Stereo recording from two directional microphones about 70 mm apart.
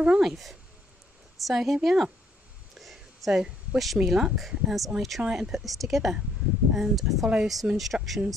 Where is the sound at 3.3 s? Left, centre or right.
Centre.